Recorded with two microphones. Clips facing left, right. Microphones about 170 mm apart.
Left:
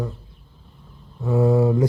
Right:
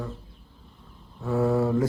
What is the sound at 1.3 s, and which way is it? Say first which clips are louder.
Speech: left 5 dB; 15° left (ahead or behind).